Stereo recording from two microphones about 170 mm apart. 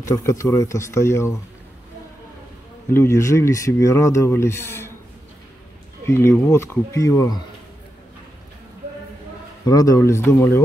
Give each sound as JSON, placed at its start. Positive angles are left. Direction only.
{"t": 0.0, "sound": "speech", "side_deg": 20}
{"t": 2.9, "sound": "speech", "side_deg": 15}
{"t": 6.0, "sound": "speech", "side_deg": 15}
{"t": 9.7, "sound": "speech", "side_deg": 20}